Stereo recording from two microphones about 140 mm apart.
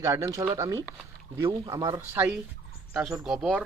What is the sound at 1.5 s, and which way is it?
Speech, 35° right (ahead or behind).